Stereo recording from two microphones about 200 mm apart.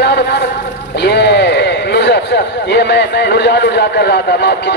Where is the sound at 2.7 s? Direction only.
55° left (ahead or behind).